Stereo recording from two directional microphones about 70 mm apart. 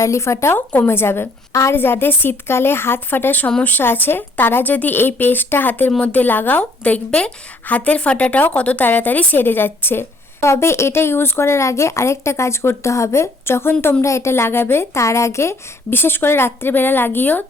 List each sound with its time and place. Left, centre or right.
0.0 s a woman's voice: left